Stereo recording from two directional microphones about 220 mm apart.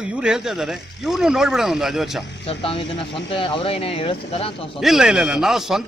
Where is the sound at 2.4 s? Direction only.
25° left (ahead or behind).